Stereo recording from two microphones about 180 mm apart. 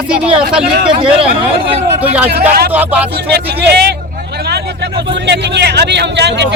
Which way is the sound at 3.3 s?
65° right (ahead or behind).